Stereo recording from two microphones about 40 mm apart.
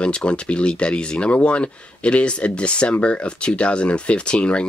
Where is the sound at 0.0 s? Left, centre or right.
Left.